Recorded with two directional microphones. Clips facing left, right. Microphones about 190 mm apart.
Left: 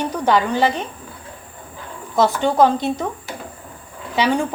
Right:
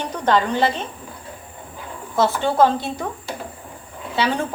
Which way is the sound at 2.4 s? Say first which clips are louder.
Left 1 dB; 15° left (ahead or behind).